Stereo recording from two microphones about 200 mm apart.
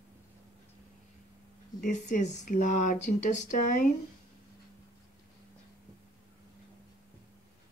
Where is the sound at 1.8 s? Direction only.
40° left (ahead or behind).